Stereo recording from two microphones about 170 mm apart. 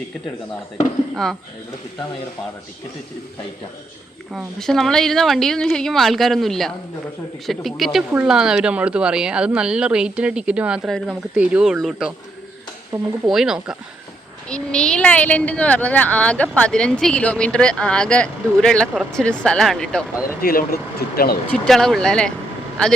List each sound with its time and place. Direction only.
1.1 s a woman's voice: centre (ahead or behind)
4.4 s a woman's voice: centre (ahead or behind)
12.9 s speech: 15° right (ahead or behind)
13.2 s a woman's voice: 5° right (ahead or behind)
20.2 s speech: 60° left (ahead or behind)
21.5 s a woman's voice: 5° left (ahead or behind)